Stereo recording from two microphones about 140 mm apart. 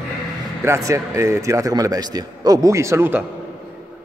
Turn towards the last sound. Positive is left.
turn(degrees=-20)  # may be behind; listen again after turning